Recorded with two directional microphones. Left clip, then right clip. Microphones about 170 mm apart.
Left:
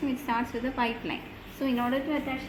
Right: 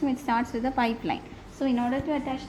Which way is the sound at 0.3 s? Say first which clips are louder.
Right 3 dB; 65° right (ahead or behind).